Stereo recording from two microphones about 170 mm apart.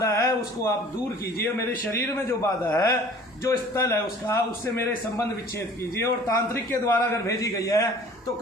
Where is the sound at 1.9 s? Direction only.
15° left (ahead or behind).